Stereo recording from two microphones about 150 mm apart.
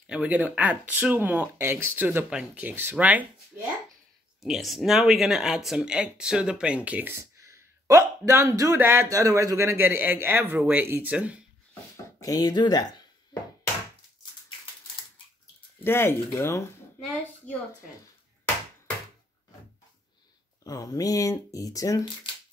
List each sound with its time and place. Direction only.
0.0 s speech: 5° right (ahead or behind)
12.2 s speech: 25° left (ahead or behind)
15.8 s speech: 15° left (ahead or behind)
20.6 s speech: 25° left (ahead or behind)